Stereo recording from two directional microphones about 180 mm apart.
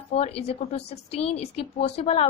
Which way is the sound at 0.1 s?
35° left (ahead or behind).